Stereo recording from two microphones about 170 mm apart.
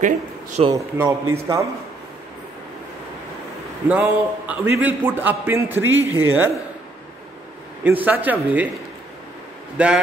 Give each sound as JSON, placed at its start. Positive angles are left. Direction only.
{"t": 0.0, "sound": "speech", "side_deg": -45}
{"t": 1.0, "sound": "a man's voice", "side_deg": -15}
{"t": 3.9, "sound": "a man's voice", "side_deg": -10}
{"t": 7.8, "sound": "a man's voice", "side_deg": -10}
{"t": 9.8, "sound": "a man's voice", "side_deg": -5}